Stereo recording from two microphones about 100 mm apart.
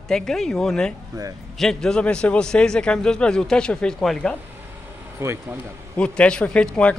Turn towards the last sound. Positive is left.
turn(degrees=10)  # may be behind; listen again after turning